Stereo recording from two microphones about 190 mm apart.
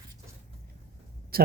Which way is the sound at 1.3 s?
50° right (ahead or behind).